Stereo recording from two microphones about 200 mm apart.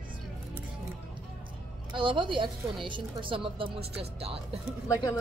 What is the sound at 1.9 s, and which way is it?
A woman's voice, 25° right (ahead or behind).